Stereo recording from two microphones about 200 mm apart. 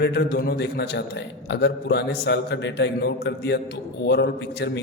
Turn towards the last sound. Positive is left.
turn(degrees=60)  # may be behind; listen again after turning